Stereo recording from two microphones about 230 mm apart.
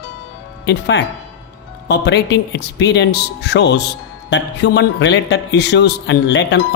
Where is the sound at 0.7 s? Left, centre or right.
Left.